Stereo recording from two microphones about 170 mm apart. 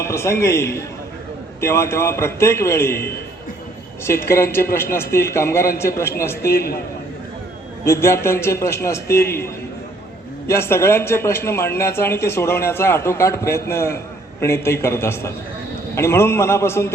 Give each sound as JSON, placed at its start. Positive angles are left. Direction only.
{"t": 0.0, "sound": "speech", "side_deg": 15}
{"t": 6.5, "sound": "a man's voice", "side_deg": 65}
{"t": 7.9, "sound": "speech", "side_deg": 15}
{"t": 10.4, "sound": "speech", "side_deg": 15}